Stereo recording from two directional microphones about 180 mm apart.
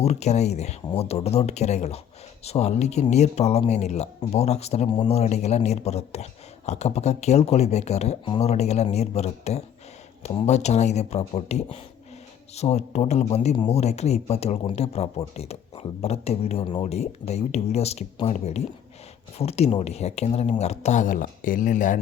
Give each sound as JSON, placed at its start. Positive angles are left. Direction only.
{"t": 0.0, "sound": "speech", "side_deg": 35}